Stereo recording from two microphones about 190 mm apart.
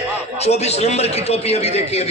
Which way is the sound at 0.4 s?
35° left (ahead or behind).